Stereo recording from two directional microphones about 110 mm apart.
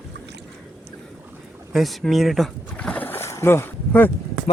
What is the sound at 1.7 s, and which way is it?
Speech, centre (ahead or behind).